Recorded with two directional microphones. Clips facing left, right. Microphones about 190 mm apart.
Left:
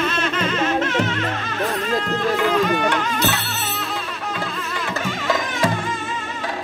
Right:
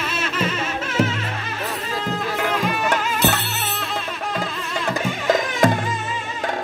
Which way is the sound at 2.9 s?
45° right (ahead or behind).